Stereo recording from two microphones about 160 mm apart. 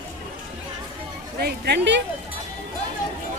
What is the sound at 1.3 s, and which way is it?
Speech, 85° right.